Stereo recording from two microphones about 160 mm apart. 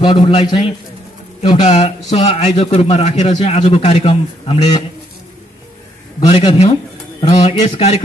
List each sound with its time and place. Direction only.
0.0 s a man's voice: 30° left (ahead or behind)
1.6 s a man's voice: 40° left (ahead or behind)
3.3 s a man's voice: 30° left (ahead or behind)
6.1 s a man's voice: 25° left (ahead or behind)